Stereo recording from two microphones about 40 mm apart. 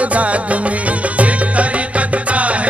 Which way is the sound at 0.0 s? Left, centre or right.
Right.